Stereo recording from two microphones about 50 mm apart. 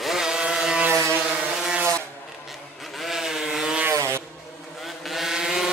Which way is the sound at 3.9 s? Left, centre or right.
Right.